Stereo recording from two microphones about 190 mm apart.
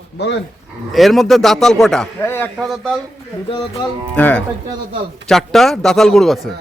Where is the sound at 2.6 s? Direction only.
Centre (ahead or behind).